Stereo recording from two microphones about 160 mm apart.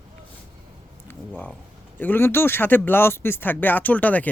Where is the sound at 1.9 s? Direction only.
15° left (ahead or behind).